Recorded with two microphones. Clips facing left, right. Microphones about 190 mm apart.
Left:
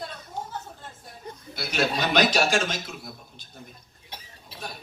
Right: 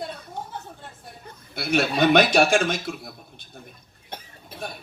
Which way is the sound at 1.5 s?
55° right (ahead or behind).